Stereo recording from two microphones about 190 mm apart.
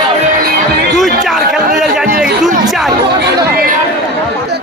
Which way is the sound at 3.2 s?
50° right (ahead or behind).